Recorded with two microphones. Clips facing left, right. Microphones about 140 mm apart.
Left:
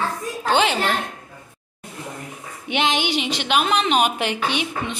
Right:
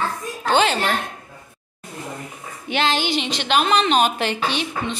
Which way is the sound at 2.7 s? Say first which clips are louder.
Even; 15° left (ahead or behind).